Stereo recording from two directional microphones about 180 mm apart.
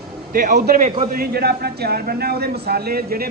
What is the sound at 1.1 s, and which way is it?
A man's voice, 60° right (ahead or behind).